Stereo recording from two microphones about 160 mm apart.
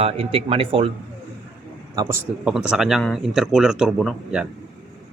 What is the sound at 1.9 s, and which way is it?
Speech, 25° right (ahead or behind).